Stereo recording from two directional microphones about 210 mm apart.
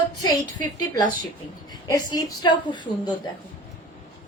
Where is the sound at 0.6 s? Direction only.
20° left (ahead or behind).